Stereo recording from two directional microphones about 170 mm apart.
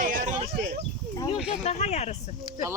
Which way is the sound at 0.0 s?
45° right (ahead or behind).